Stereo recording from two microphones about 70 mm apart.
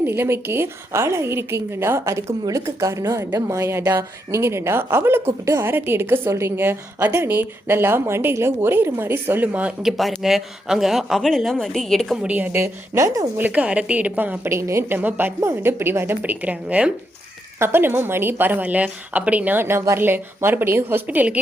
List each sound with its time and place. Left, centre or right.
0.0 s a woman's voice: right
10.1 s a man's voice: centre
12.3 s speech: right
12.5 s a woman's voice: right
13.3 s speech: right
14.5 s a woman's voice: right
14.9 s speech: right
17.6 s a woman's voice: right